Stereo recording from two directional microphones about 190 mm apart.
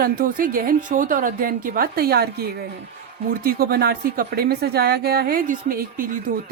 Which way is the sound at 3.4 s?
50° right (ahead or behind).